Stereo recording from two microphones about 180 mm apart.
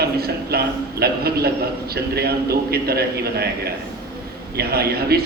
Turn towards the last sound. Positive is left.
turn(degrees=-60)  # may be behind; listen again after turning